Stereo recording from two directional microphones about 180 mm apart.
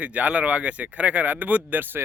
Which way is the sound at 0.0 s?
10° right (ahead or behind).